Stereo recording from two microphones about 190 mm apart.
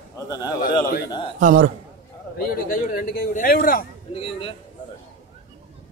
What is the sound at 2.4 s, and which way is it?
A man's voice, 50° left (ahead or behind).